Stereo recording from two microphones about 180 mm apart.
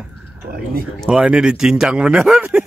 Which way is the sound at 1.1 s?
5° right (ahead or behind).